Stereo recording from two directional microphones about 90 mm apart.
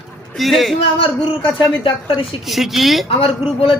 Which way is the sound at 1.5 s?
70° left (ahead or behind).